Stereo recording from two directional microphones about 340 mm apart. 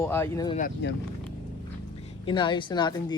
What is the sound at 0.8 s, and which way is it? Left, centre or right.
Speech, left.